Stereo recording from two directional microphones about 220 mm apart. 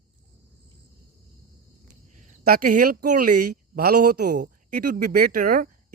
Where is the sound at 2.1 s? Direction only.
40° right (ahead or behind).